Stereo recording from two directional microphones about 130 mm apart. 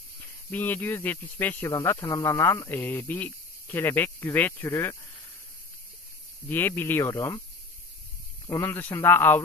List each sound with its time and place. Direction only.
0.2 s speech: 15° left (ahead or behind)
6.5 s speech: 15° left (ahead or behind)
8.5 s speech: 20° left (ahead or behind)